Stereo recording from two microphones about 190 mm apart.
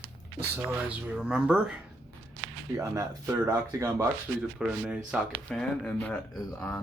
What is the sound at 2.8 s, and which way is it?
Speech, 15° right (ahead or behind).